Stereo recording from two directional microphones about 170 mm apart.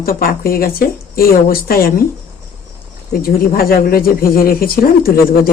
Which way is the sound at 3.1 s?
60° left (ahead or behind).